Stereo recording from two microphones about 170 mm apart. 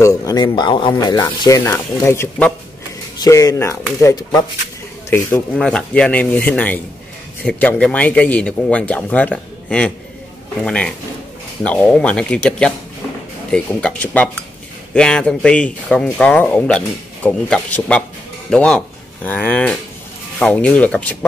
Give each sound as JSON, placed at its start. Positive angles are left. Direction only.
{"t": 0.0, "sound": "speech", "side_deg": 20}
{"t": 5.1, "sound": "speech", "side_deg": 10}